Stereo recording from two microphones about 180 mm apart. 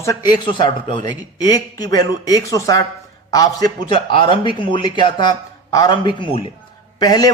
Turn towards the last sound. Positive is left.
turn(degrees=20)  # may be behind; listen again after turning